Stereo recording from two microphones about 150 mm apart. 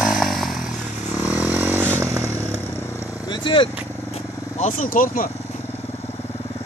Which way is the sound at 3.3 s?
35° left (ahead or behind).